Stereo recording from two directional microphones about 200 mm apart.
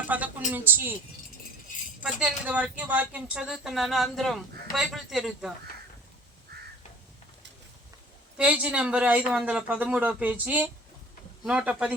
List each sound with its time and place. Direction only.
0.1 s a woman's voice: 10° right (ahead or behind)
2.0 s speech: 5° right (ahead or behind)
6.5 s crow: 50° right (ahead or behind)
8.4 s speech: 5° right (ahead or behind)